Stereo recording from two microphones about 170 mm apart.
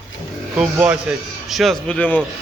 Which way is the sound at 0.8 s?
10° right (ahead or behind).